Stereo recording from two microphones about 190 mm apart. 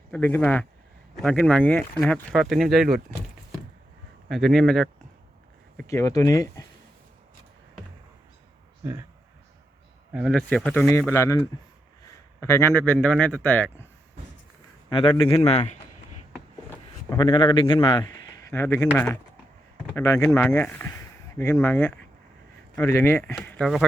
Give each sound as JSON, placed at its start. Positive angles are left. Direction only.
{"t": 0.1, "sound": "speech", "side_deg": 10}
{"t": 4.3, "sound": "speech", "side_deg": 0}
{"t": 5.7, "sound": "speech", "side_deg": 15}
{"t": 8.8, "sound": "speech", "side_deg": -15}
{"t": 10.1, "sound": "speech", "side_deg": -5}
{"t": 10.3, "sound": "speech", "side_deg": 5}
{"t": 14.8, "sound": "a man's voice", "side_deg": 25}
{"t": 17.1, "sound": "speech", "side_deg": 20}
{"t": 18.6, "sound": "speech", "side_deg": 10}
{"t": 20.0, "sound": "speech", "side_deg": 15}